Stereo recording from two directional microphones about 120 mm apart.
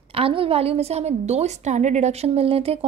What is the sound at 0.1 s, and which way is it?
A woman's voice, 50° right (ahead or behind).